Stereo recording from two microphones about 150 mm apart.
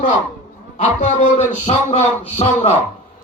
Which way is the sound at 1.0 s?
55° left (ahead or behind).